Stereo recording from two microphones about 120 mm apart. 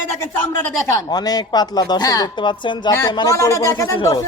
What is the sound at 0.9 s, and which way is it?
A woman's voice, 30° left (ahead or behind).